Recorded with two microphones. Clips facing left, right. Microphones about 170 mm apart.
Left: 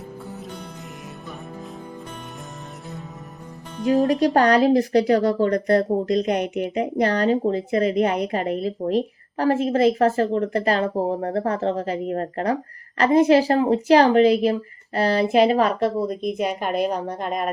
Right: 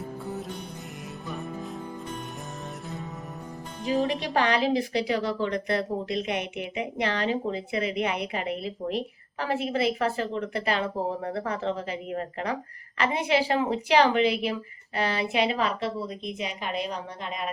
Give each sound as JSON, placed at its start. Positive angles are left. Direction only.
{"t": 4.0, "sound": "speech", "side_deg": 40}